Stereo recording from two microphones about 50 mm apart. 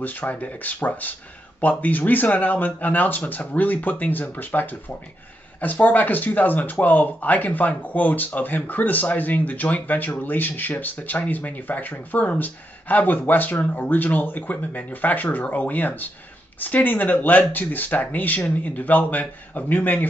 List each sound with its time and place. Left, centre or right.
0.0 s speech: left